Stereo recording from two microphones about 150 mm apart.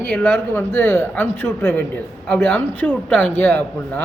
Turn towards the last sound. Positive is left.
turn(degrees=15)  # may be behind; listen again after turning